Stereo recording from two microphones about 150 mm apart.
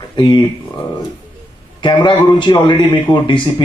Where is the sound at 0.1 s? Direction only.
30° left (ahead or behind).